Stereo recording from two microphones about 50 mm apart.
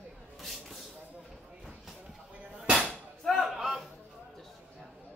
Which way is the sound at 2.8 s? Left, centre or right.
Centre.